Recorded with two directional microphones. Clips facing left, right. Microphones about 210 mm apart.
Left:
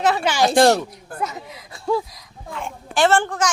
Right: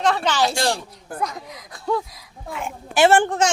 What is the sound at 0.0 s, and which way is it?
Speech, 10° left (ahead or behind).